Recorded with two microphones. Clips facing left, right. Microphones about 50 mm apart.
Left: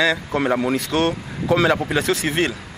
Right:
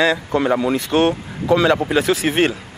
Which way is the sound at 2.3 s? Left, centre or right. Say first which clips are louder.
Right 4 dB; right.